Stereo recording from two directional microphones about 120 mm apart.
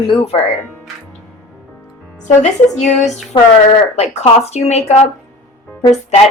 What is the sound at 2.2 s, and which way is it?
Speech, 75° left (ahead or behind).